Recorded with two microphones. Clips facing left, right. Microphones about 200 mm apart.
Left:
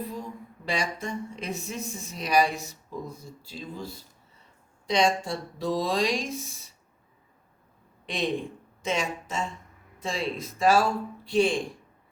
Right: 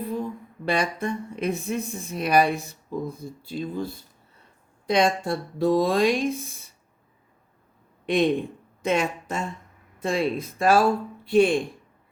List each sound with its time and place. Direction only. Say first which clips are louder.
0.1 s speech: right 7 dB; 55° right (ahead or behind)
8.0 s speech: right 7 dB; 60° right (ahead or behind)